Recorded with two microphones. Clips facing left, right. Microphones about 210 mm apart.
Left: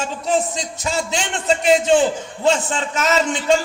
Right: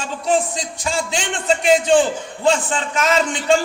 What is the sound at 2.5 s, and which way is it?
A man's voice, 45° left (ahead or behind).